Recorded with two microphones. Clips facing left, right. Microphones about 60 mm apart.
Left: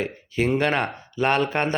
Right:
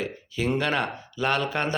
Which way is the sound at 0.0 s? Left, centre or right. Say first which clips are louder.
Left 4 dB; left.